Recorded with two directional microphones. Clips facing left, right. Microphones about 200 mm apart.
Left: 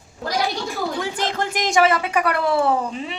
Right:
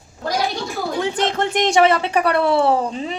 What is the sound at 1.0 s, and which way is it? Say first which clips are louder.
Speech: right 4 dB; 20° right (ahead or behind).